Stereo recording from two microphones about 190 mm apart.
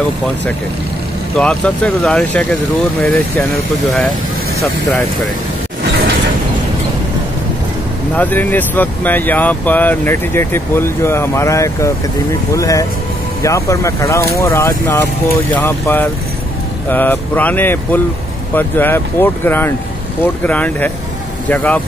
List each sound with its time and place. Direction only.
1.4 s speech: 5° left (ahead or behind)
8.2 s speech: 10° left (ahead or behind)